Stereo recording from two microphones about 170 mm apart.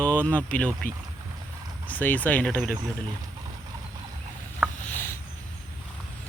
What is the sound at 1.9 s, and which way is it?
Speech, 10° left (ahead or behind).